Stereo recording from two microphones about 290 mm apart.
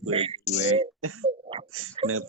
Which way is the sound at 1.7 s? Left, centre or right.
Right.